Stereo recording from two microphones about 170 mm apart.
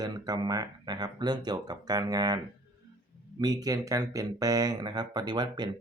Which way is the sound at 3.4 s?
20° right (ahead or behind).